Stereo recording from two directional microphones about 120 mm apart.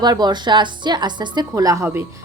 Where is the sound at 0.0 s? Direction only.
35° right (ahead or behind).